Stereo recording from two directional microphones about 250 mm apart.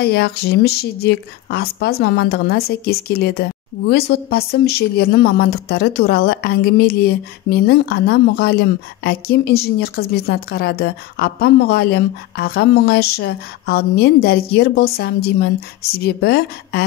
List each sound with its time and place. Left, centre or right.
0.0 s a woman's voice: left